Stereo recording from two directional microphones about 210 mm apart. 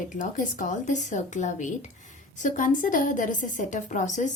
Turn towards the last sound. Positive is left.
turn(degrees=35)  # may be behind; listen again after turning